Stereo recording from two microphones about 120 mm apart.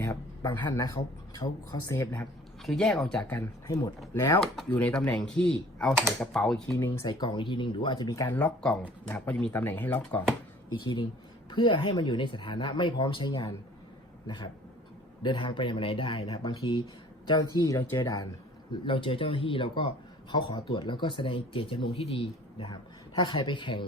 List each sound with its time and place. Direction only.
0.0 s a sound: 25° left (ahead or behind)
0.5 s speech: 35° left (ahead or behind)
2.6 s speech: 5° left (ahead or behind)
3.3 s speech: 25° left (ahead or behind)
4.1 s speech: 20° left (ahead or behind)
5.9 s speech: 20° right (ahead or behind)
6.1 s speech: 5° left (ahead or behind)
7.0 s speech: 35° left (ahead or behind)
8.3 s speech: 15° left (ahead or behind)
10.7 s speech: 35° left (ahead or behind)
18.7 s speech: 45° left (ahead or behind)